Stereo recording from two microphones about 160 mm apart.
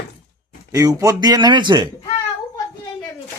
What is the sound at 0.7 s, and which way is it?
Speech, 20° right (ahead or behind).